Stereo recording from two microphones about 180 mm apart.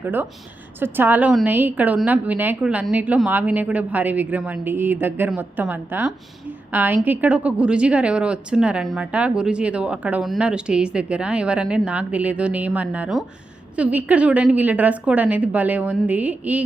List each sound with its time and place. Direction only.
0.0 s a woman's voice: 10° right (ahead or behind)